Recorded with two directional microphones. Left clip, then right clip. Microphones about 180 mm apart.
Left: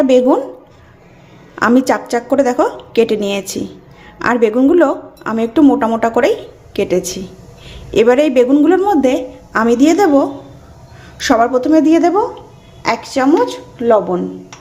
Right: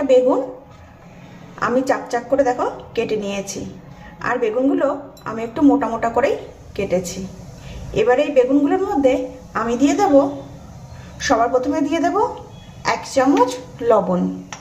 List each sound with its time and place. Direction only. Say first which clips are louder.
1.5 s a woman's voice: left 6 dB; 60° left (ahead or behind); by 14.0 s 30° left (ahead or behind)